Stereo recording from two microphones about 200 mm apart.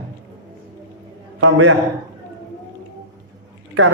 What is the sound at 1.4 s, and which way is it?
Speech, 80° right.